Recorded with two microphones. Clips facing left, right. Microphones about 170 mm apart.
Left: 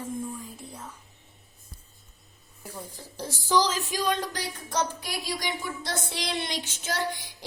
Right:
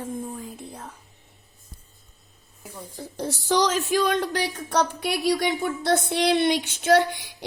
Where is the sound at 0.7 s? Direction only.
55° right (ahead or behind).